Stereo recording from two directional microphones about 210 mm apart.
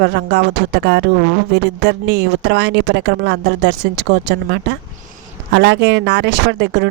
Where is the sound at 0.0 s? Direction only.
55° right (ahead or behind).